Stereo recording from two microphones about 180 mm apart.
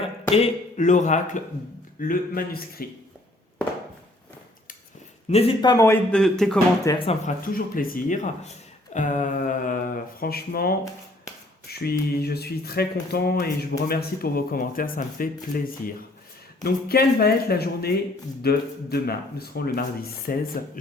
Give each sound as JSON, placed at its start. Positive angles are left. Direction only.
{"t": 0.0, "sound": "speech", "side_deg": 35}
{"t": 5.3, "sound": "speech", "side_deg": 30}
{"t": 5.7, "sound": "speech", "side_deg": 15}
{"t": 6.9, "sound": "speech", "side_deg": 20}
{"t": 7.3, "sound": "speech", "side_deg": 50}
{"t": 11.7, "sound": "speech", "side_deg": 60}